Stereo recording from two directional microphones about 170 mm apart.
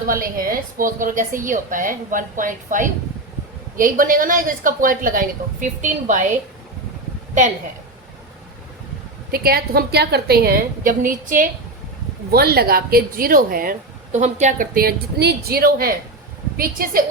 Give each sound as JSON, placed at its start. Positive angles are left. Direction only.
{"t": 0.1, "sound": "a woman's voice", "side_deg": -55}
{"t": 9.3, "sound": "speech", "side_deg": -65}
{"t": 12.3, "sound": "speech", "side_deg": -65}